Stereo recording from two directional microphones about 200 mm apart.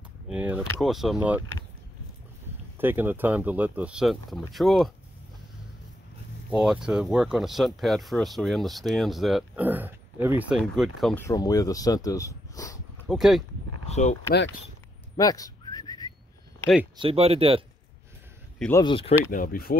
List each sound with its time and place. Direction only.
0.3 s speech: 10° right (ahead or behind)
2.8 s speech: 10° right (ahead or behind)
6.5 s speech: 5° right (ahead or behind)
11.1 s speech: 15° left (ahead or behind)
13.1 s speech: centre (ahead or behind)
13.8 s speech: 35° left (ahead or behind)
15.1 s a sound: 20° left (ahead or behind)
16.9 s speech: 25° right (ahead or behind)
18.8 s speech: 25° left (ahead or behind)
19.3 s speech: 45° left (ahead or behind)